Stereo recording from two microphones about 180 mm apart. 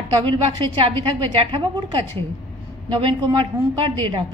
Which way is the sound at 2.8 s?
30° right (ahead or behind).